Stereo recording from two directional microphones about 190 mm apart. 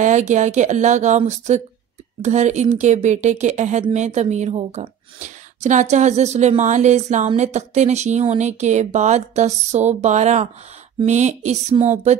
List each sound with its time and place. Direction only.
0.0 s a woman's voice: 40° right (ahead or behind)